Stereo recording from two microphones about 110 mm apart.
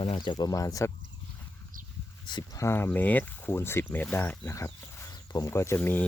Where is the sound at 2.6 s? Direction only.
20° left (ahead or behind).